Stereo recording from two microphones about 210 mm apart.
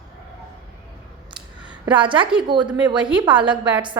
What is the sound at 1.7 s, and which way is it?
A woman's voice, 20° right (ahead or behind).